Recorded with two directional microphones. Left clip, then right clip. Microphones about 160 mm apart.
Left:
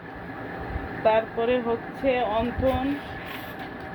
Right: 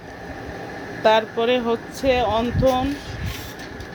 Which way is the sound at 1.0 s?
75° right (ahead or behind).